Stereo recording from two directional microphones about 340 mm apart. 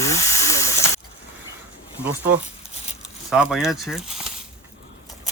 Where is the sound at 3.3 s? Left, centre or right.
Centre.